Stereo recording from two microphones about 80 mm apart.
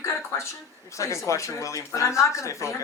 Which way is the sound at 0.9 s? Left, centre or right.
Left.